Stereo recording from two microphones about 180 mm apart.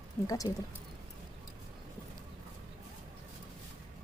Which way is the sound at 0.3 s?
20° left (ahead or behind).